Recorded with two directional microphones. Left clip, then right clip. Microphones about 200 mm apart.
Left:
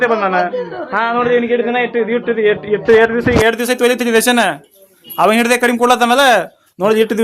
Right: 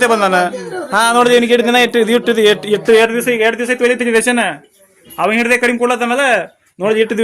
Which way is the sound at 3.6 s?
5° left (ahead or behind).